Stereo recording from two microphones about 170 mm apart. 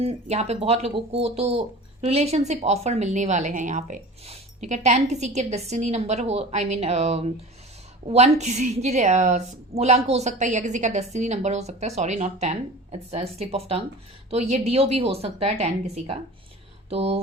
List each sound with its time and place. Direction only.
0.0 s speech: 40° right (ahead or behind)